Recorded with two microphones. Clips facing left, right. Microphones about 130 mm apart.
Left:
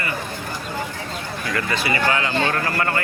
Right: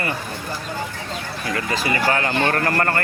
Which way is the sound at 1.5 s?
35° right (ahead or behind).